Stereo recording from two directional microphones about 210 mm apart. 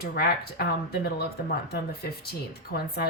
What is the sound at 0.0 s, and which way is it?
Speech, 45° left (ahead or behind).